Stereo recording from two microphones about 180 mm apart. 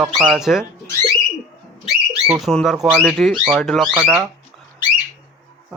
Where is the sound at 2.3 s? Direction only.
Centre (ahead or behind).